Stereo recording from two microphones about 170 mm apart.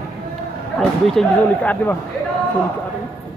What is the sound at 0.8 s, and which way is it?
Speech, 5° left (ahead or behind).